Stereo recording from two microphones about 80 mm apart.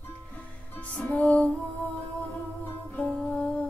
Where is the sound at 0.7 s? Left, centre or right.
Centre.